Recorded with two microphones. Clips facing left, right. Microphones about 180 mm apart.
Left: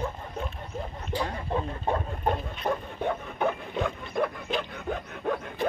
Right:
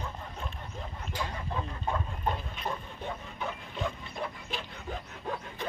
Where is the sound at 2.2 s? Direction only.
55° left (ahead or behind).